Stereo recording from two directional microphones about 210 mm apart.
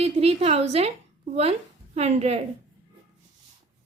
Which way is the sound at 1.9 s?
30° right (ahead or behind).